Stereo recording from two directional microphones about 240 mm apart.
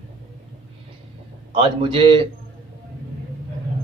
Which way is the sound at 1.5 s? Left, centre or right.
Right.